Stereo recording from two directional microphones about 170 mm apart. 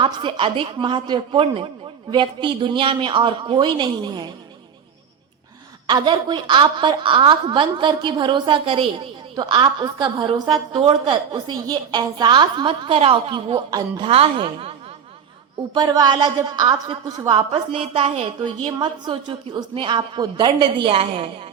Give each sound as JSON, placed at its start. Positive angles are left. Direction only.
{"t": 0.0, "sound": "a woman's voice", "side_deg": -30}
{"t": 5.9, "sound": "a woman's voice", "side_deg": -25}
{"t": 15.7, "sound": "a woman's voice", "side_deg": -25}